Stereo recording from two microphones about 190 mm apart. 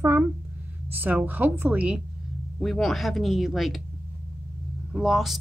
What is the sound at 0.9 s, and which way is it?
A woman's voice, 10° right (ahead or behind).